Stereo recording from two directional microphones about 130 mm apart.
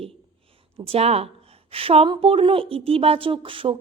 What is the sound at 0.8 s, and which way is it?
A woman's voice, 50° right (ahead or behind).